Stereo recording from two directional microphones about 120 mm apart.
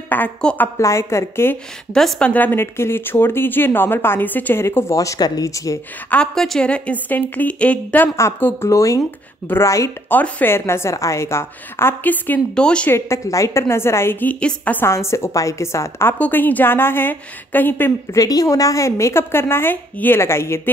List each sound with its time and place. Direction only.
0.1 s a woman's voice: 10° left (ahead or behind)
0.7 s speech: 25° left (ahead or behind)
2.0 s speech: 5° left (ahead or behind); by 5.8 s 25° left (ahead or behind)
6.0 s a woman's voice: 5° left (ahead or behind)
12.9 s a woman's voice: 25° left (ahead or behind)
18.1 s speech: 30° left (ahead or behind)